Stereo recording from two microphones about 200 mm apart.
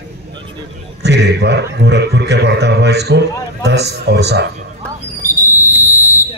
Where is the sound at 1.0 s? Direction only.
55° right (ahead or behind).